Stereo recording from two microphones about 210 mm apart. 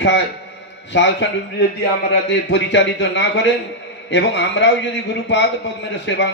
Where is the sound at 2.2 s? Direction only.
55° left (ahead or behind).